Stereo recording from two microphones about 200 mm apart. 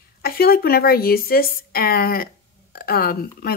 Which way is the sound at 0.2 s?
50° left (ahead or behind).